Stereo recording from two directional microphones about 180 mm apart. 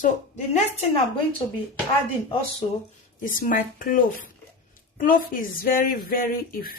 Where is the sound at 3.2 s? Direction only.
50° left (ahead or behind).